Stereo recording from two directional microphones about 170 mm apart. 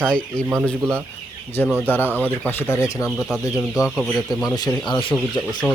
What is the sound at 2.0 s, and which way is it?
Speech, 10° right (ahead or behind).